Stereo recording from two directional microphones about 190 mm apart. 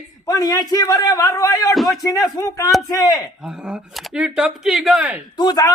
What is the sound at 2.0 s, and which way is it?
A man's voice, 20° left (ahead or behind).